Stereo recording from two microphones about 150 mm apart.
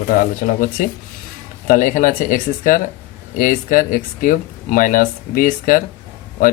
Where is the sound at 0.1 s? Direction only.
60° left (ahead or behind).